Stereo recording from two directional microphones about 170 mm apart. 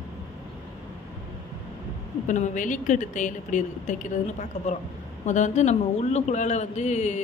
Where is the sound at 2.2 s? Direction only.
50° left (ahead or behind).